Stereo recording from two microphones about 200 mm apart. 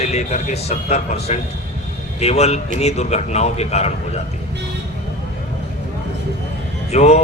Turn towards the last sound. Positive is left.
turn(degrees=35)  # may be behind; listen again after turning